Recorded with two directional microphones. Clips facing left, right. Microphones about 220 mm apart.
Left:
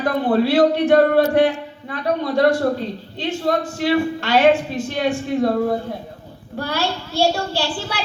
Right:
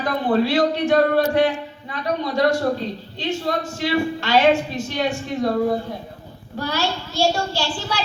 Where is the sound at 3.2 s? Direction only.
55° left (ahead or behind).